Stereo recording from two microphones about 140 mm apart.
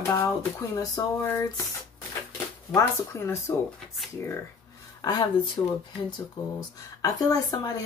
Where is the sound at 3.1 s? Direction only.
20° left (ahead or behind).